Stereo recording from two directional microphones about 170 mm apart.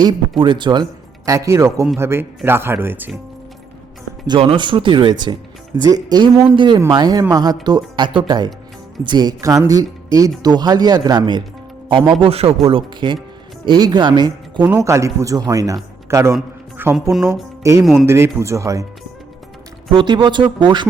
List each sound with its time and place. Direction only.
0.0 s speech: 25° right (ahead or behind); by 3.2 s 10° right (ahead or behind)
4.3 s speech: 30° right (ahead or behind)
16.7 s a sound: 10° right (ahead or behind)
17.1 s speech: centre (ahead or behind)
17.6 s speech: 20° right (ahead or behind)
19.9 s speech: 30° right (ahead or behind)